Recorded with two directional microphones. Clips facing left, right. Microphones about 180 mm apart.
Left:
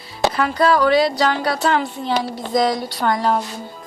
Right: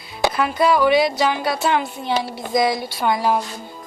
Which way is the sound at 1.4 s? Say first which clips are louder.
Left 1 dB; 5° right (ahead or behind).